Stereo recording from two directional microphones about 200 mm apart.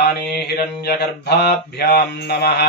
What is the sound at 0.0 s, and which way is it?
Mantra, 55° left (ahead or behind).